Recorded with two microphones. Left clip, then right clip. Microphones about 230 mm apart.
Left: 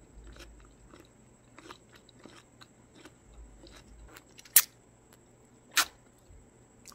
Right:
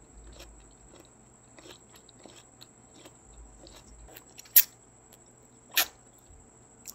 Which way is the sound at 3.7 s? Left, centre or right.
Left.